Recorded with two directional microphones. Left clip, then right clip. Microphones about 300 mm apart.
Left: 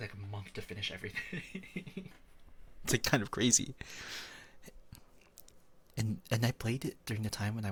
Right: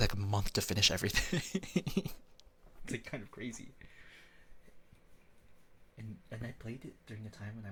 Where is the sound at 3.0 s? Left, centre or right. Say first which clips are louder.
Left 13 dB; left.